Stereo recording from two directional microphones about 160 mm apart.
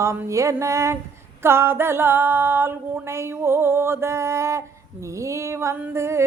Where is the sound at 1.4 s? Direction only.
15° right (ahead or behind).